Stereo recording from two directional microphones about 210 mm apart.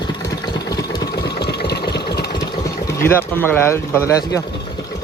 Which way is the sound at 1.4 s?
50° left (ahead or behind).